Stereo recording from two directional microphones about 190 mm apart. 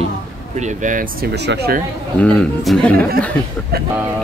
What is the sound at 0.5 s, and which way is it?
Speech, 40° right (ahead or behind).